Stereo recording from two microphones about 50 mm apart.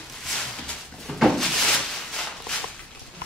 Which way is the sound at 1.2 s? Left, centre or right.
Centre.